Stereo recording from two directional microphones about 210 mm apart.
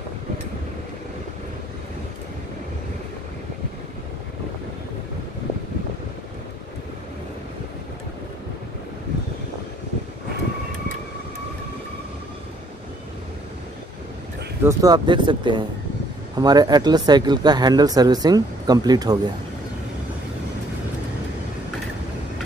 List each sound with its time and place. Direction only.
14.6 s speech: 15° right (ahead or behind)